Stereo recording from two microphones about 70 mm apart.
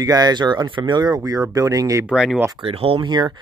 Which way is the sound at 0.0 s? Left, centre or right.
Right.